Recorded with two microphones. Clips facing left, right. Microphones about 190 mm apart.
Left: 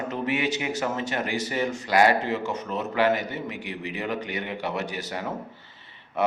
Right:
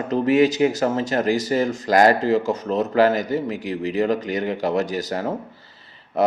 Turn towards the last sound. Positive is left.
turn(degrees=-35)  # may be behind; listen again after turning